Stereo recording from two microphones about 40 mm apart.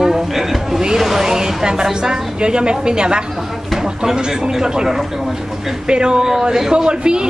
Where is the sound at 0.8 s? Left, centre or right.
Centre.